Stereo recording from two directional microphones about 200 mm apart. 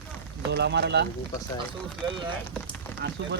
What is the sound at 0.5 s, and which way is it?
Speech, 55° right (ahead or behind).